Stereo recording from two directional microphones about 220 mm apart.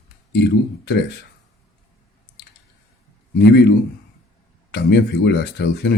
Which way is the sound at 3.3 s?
50° left (ahead or behind).